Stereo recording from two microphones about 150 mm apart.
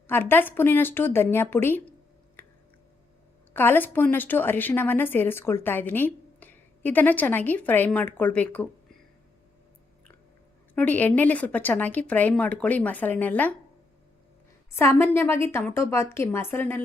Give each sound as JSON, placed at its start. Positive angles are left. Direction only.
{"t": 0.1, "sound": "a woman's voice", "side_deg": 15}
{"t": 2.4, "sound": "a sound", "side_deg": 10}
{"t": 3.5, "sound": "a woman's voice", "side_deg": 15}
{"t": 10.8, "sound": "a woman's voice", "side_deg": 10}
{"t": 14.7, "sound": "a woman's voice", "side_deg": 15}